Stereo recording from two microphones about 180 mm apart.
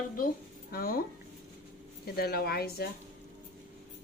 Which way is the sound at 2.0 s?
60° left (ahead or behind).